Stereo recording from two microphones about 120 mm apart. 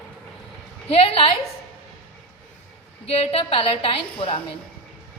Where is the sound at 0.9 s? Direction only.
55° left (ahead or behind).